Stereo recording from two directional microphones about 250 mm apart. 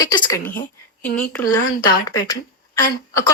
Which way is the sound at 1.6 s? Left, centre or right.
Left.